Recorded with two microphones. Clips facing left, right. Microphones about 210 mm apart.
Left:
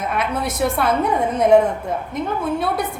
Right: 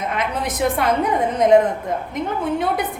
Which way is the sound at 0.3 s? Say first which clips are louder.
Right 1 dB; 15° right (ahead or behind).